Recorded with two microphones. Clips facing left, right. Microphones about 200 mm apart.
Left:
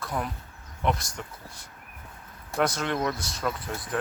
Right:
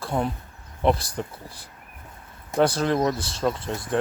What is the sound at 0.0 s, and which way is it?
Cricket, 30° right (ahead or behind).